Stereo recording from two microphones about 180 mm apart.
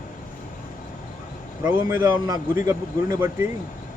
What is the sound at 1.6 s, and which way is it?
A man's voice, 10° right (ahead or behind).